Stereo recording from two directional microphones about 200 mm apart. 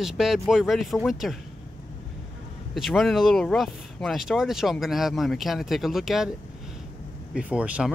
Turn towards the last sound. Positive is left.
turn(degrees=-5)  # may be behind; listen again after turning